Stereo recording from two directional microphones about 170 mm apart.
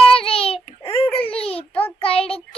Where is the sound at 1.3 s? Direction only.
35° left (ahead or behind).